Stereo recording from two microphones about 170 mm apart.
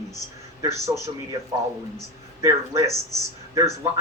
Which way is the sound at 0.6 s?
20° right (ahead or behind).